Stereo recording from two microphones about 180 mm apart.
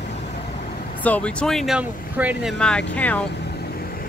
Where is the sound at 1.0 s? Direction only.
5° left (ahead or behind); by 2.5 s 10° right (ahead or behind).